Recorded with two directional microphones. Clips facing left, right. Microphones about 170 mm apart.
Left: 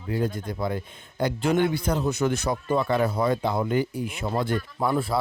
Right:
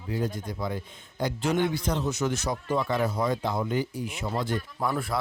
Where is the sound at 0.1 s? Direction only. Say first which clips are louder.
Left 3 dB; 60° left (ahead or behind).